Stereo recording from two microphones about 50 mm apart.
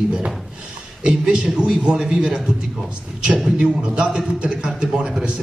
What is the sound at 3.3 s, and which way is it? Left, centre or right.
Speech, centre.